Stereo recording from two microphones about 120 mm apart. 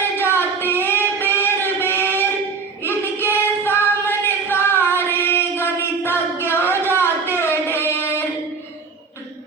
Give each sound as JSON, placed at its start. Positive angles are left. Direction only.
{"t": 0.2, "sound": "female singing", "side_deg": 20}
{"t": 2.8, "sound": "singing", "side_deg": 20}
{"t": 7.3, "sound": "a sound", "side_deg": 20}